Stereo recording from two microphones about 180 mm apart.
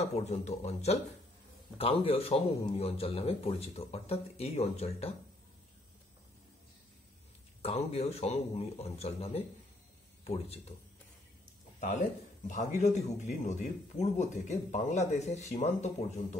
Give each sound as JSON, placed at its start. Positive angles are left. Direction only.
{"t": 0.0, "sound": "speech", "side_deg": 35}
{"t": 7.6, "sound": "speech", "side_deg": 35}
{"t": 12.4, "sound": "speech", "side_deg": 45}